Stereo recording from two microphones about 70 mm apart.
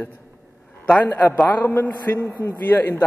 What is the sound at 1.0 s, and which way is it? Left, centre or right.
A man's voice, left.